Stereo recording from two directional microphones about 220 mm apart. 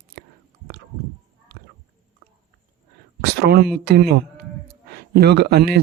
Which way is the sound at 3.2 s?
45° right (ahead or behind).